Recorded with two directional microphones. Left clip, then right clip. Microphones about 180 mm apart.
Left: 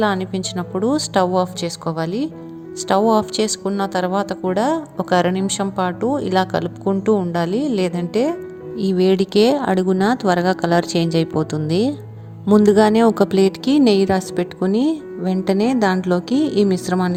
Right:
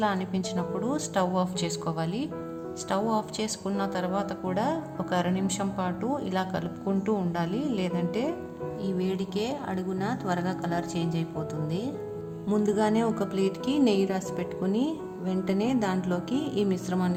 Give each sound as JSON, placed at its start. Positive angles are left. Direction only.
{"t": 0.0, "sound": "a woman's voice", "side_deg": 35}